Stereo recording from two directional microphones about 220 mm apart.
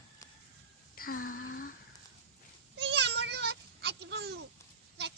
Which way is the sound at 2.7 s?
50° right (ahead or behind).